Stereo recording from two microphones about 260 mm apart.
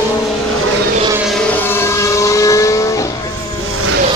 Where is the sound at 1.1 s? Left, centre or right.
Centre.